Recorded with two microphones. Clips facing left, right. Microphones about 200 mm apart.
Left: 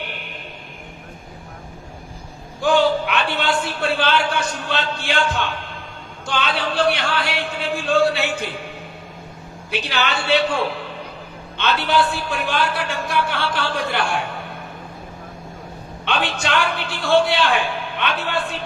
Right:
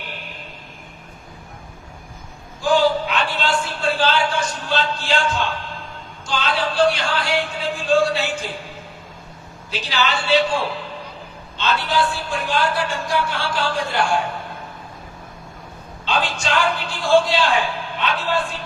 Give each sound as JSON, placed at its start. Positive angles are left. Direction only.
{"t": 2.6, "sound": "a man's voice", "side_deg": 60}
{"t": 9.7, "sound": "a man's voice", "side_deg": 60}
{"t": 16.0, "sound": "a man's voice", "side_deg": 60}